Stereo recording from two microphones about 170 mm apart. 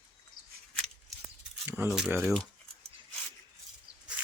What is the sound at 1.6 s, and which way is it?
Keys jangling, 15° right (ahead or behind).